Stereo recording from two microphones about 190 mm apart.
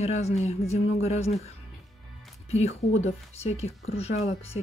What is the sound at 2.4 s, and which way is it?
Speech, 35° left (ahead or behind).